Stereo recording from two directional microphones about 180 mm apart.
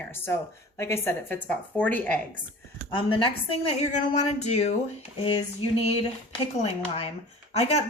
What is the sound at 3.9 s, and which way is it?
Speech, 40° left (ahead or behind).